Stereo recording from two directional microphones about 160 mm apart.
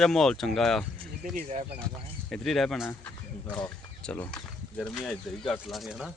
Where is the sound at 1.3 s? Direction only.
45° right (ahead or behind).